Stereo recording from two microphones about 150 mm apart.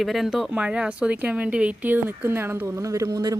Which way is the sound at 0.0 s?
Centre (ahead or behind).